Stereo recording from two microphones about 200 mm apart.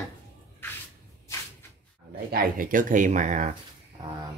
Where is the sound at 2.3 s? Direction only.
45° right (ahead or behind).